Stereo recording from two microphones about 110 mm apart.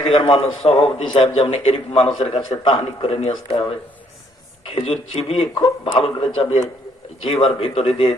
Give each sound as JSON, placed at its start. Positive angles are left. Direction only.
{"t": 0.1, "sound": "a man's voice", "side_deg": 60}